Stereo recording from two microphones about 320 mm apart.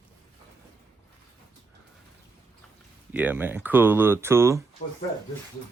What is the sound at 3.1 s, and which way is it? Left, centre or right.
Speech, centre.